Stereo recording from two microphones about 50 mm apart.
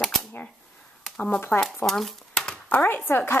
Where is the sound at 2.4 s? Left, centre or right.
Left.